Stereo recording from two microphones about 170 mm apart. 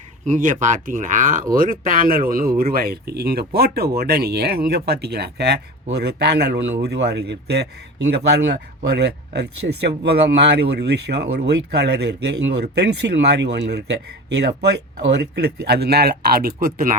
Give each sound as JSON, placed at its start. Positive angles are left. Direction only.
{"t": 0.3, "sound": "speech", "side_deg": -50}
{"t": 8.9, "sound": "speech", "side_deg": -75}